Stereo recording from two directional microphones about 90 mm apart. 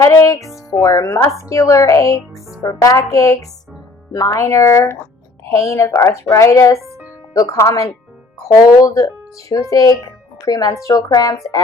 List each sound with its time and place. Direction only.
0.0 s speech: 35° left (ahead or behind)